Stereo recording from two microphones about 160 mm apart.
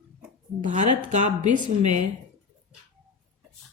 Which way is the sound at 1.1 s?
50° right (ahead or behind).